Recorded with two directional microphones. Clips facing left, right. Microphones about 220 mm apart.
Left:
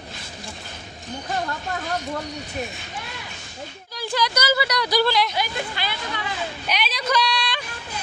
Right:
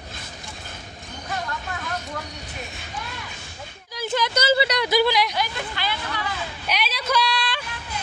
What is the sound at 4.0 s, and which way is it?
A woman's voice, 20° right (ahead or behind).